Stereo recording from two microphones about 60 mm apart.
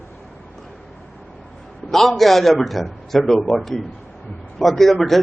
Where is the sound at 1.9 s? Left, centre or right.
Centre.